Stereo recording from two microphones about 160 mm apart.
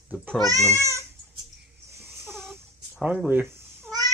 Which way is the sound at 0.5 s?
20° right (ahead or behind).